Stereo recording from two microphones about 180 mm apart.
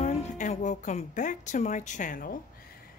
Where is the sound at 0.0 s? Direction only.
40° left (ahead or behind).